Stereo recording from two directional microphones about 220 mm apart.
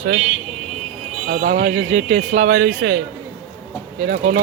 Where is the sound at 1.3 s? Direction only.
40° right (ahead or behind).